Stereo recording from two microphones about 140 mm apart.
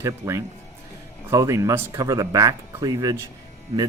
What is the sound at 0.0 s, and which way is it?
Speech, 20° right (ahead or behind).